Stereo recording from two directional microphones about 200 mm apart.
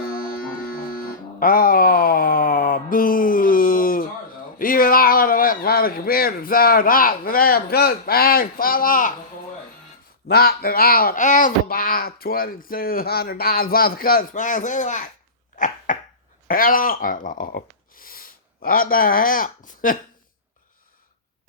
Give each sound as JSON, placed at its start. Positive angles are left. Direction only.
{"t": 0.9, "sound": "a sound", "side_deg": 45}
{"t": 4.5, "sound": "speech", "side_deg": 45}
{"t": 10.2, "sound": "speech", "side_deg": 50}
{"t": 15.5, "sound": "dog", "side_deg": 40}
{"t": 16.5, "sound": "speech", "side_deg": 45}